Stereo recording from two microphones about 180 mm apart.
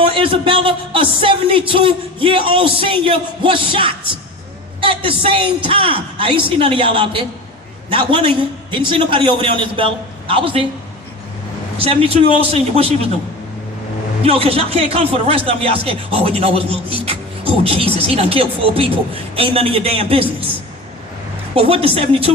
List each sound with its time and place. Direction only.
0.0 s speech: 30° right (ahead or behind)
11.8 s speech: 35° right (ahead or behind)
14.3 s speech: 35° right (ahead or behind)
21.5 s speech: 30° right (ahead or behind)